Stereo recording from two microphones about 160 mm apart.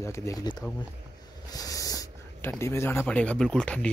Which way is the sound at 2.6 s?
15° left (ahead or behind).